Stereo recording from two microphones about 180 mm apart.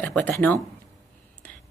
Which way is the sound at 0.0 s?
10° left (ahead or behind).